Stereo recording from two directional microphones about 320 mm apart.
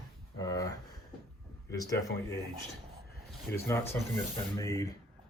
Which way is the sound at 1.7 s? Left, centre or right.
Centre.